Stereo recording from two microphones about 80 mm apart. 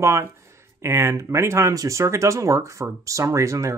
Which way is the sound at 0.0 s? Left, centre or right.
Right.